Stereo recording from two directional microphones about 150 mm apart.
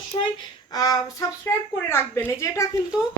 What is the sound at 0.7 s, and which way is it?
A woman's voice, 25° left (ahead or behind).